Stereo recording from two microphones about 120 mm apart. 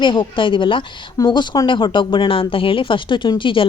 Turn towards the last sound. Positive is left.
turn(degrees=45)  # may be behind; listen again after turning